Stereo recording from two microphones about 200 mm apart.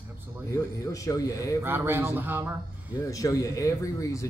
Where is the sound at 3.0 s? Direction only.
15° left (ahead or behind).